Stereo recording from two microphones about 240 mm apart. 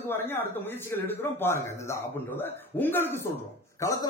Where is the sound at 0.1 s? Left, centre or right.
Centre.